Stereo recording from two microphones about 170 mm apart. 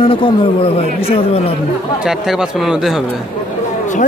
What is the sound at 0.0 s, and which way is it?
Speech, 30° left (ahead or behind).